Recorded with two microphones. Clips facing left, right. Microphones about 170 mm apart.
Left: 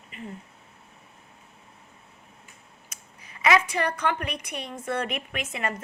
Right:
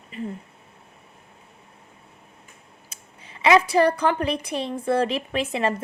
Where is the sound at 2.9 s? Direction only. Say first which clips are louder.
Right 3 dB; 30° right (ahead or behind).